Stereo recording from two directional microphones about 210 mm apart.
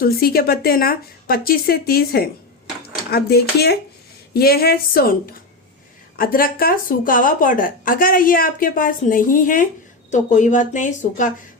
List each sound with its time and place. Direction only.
0.0 s a woman's voice: 45° left (ahead or behind)